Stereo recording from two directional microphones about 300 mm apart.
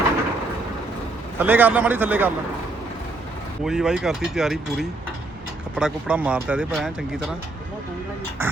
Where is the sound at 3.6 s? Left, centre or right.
Centre.